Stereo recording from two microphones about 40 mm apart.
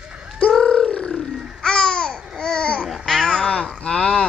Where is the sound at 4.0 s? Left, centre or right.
Centre.